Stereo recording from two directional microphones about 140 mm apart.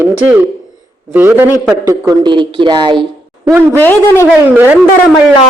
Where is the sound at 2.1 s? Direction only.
35° right (ahead or behind).